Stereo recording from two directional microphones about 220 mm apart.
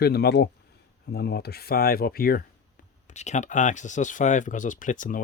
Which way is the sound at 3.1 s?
30° left (ahead or behind).